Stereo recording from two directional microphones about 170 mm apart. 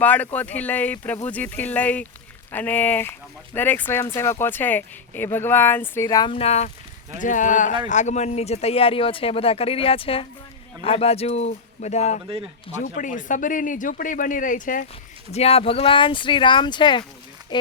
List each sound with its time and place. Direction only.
0.0 s speech: 10° left (ahead or behind); by 6.7 s 40° left (ahead or behind)
7.2 s speech: 50° left (ahead or behind)
15.3 s speech: 35° left (ahead or behind)